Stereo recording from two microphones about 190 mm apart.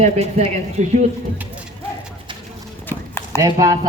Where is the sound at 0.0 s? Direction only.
35° right (ahead or behind).